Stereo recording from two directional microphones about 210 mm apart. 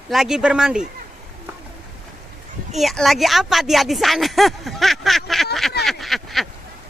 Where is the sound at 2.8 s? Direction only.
Centre (ahead or behind).